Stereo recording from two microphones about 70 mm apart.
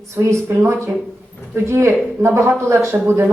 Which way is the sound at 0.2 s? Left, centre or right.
Right.